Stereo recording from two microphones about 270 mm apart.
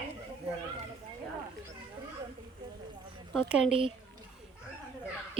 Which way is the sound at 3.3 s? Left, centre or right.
Centre.